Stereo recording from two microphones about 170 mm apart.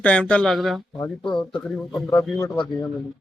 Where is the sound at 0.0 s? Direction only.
10° left (ahead or behind).